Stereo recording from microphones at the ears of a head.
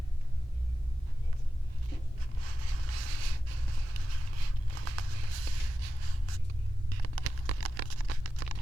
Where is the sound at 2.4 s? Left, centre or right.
Right.